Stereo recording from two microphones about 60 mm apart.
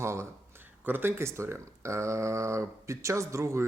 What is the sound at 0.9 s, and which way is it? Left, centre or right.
Speech, right.